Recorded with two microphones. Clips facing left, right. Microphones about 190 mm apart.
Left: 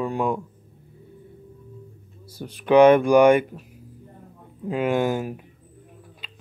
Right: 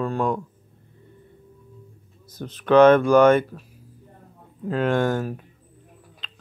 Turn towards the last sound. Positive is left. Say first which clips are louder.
# left 1 dB
turn(degrees=10)  # may be behind; listen again after turning